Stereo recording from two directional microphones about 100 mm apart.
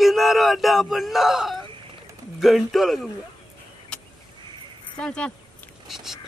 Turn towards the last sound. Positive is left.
turn(degrees=-5)  # may be behind; listen again after turning